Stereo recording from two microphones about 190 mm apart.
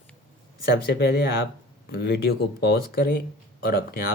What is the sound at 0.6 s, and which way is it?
Speech, 55° left (ahead or behind).